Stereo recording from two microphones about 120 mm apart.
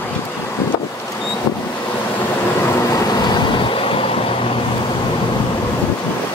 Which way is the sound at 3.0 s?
40° left (ahead or behind).